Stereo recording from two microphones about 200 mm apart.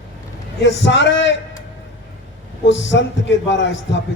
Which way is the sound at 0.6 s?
60° left (ahead or behind).